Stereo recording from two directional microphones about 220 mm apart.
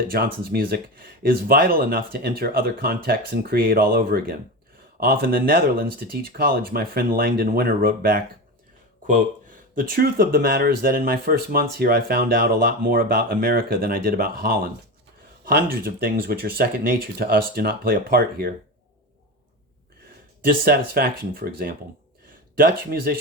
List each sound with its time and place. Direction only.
0.1 s speech: 45° right (ahead or behind)
20.4 s speech: 40° right (ahead or behind)